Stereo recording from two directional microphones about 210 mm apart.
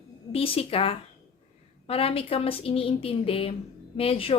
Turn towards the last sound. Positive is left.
turn(degrees=25)  # may be behind; listen again after turning